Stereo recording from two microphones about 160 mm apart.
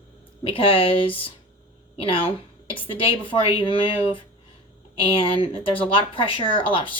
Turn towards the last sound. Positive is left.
turn(degrees=30)  # may be behind; listen again after turning